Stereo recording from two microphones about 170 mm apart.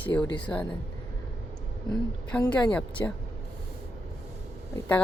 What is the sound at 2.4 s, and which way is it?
Speech, 10° left (ahead or behind).